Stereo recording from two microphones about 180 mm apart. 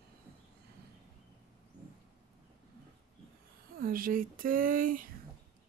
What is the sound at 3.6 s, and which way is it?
Speech, 55° right (ahead or behind).